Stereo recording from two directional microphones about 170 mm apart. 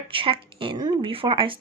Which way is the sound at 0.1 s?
30° right (ahead or behind).